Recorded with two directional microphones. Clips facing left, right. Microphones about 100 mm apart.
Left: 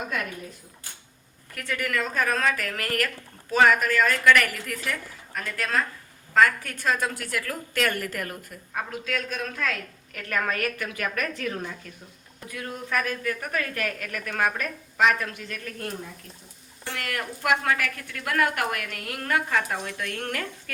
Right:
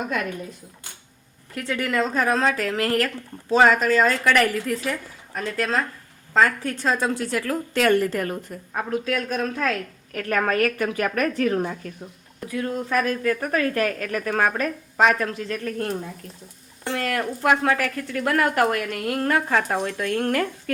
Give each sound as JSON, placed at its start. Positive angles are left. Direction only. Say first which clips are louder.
{"t": 1.6, "sound": "a woman's voice", "louder": "right 5 dB", "side_deg": -25}
{"t": 16.9, "sound": "speech", "louder": "right 7 dB", "side_deg": -35}